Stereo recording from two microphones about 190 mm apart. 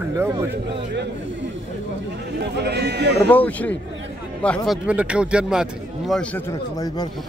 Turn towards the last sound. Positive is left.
turn(degrees=0)  # may be behind; listen again after turning